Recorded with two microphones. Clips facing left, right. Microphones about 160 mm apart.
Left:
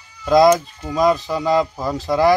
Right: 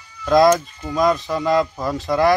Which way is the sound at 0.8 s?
Centre (ahead or behind).